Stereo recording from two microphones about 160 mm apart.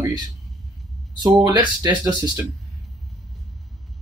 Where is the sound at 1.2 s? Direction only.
25° right (ahead or behind).